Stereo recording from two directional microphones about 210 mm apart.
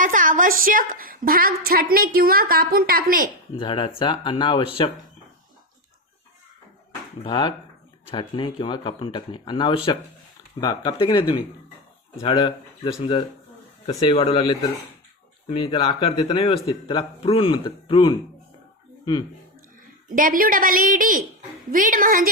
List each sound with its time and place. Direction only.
0.0 s a woman's voice: 40° right (ahead or behind)
3.6 s speech: 25° left (ahead or behind)
7.3 s speech: 25° left (ahead or behind)
20.1 s a woman's voice: 40° right (ahead or behind)